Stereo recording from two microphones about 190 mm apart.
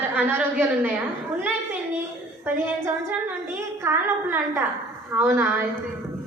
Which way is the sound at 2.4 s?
10° right (ahead or behind).